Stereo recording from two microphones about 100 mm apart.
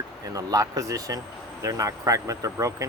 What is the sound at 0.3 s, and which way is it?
Speech, 35° right (ahead or behind).